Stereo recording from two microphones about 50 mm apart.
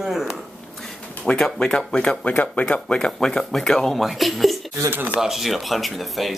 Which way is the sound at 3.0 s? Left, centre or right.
Centre.